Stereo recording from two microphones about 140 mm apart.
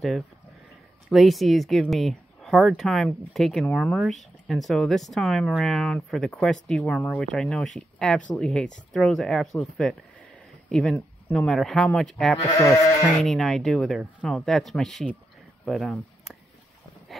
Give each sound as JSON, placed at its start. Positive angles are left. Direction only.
{"t": 1.0, "sound": "speech", "side_deg": 0}
{"t": 12.5, "sound": "sheep", "side_deg": 20}
{"t": 13.2, "sound": "speech", "side_deg": 0}